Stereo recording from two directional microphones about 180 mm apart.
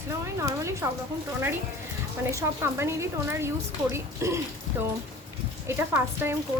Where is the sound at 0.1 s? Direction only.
15° right (ahead or behind).